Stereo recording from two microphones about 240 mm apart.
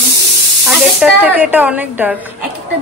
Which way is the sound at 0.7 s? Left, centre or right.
Centre.